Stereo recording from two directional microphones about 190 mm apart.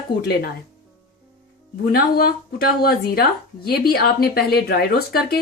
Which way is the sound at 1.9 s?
50° left (ahead or behind).